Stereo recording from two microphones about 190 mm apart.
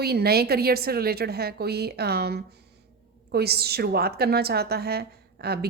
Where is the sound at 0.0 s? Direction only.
55° right (ahead or behind).